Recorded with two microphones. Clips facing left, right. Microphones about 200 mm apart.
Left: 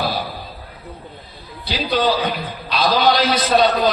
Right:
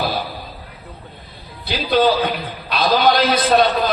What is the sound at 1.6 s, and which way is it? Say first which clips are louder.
A man's voice: right 3 dB; 55° right (ahead or behind).